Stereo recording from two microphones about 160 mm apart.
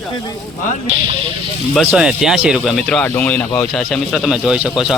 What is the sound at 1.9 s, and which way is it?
Speech, 5° right (ahead or behind).